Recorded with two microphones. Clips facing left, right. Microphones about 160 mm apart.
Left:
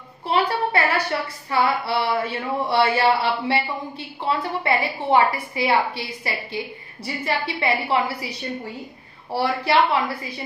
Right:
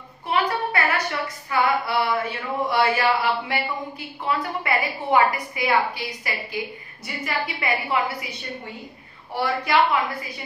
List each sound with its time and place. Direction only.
0.3 s speech: 30° left (ahead or behind)
9.3 s speech: 30° left (ahead or behind)